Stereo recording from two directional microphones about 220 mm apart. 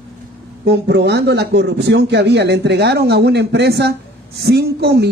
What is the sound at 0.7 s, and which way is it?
Speech, 50° right (ahead or behind).